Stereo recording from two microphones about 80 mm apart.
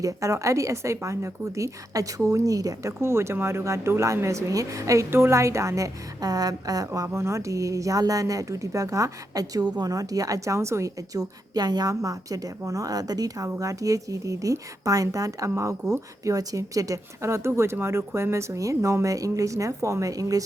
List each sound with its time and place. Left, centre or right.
0.0 s speech: right
3.0 s speech: right
7.1 s speech: right